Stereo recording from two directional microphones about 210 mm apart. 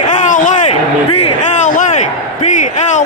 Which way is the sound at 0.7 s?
90° left.